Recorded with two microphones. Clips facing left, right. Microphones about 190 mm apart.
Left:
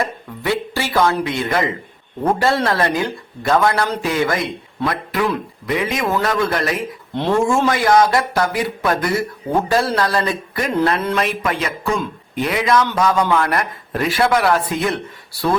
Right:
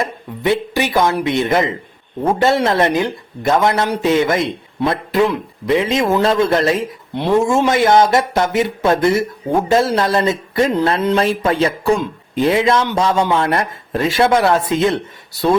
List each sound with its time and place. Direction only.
0.0 s speech: 20° right (ahead or behind)
7.2 s speech: 15° right (ahead or behind)
7.4 s speech: 25° right (ahead or behind)